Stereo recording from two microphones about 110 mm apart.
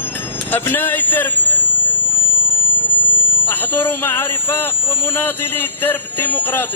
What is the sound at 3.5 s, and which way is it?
A man's voice, 15° left (ahead or behind).